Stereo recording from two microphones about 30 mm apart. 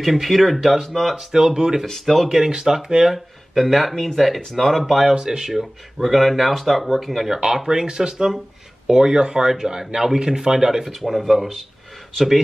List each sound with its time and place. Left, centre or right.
0.0 s speech: centre
1.1 s speech: right
1.9 s speech: centre
2.2 s speech: centre
3.5 s speech: centre
5.1 s speech: right
5.5 s speech: centre
7.5 s speech: right
10.7 s speech: centre